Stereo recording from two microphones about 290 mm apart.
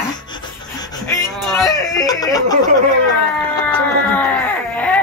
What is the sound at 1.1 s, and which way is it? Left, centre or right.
Speech, centre.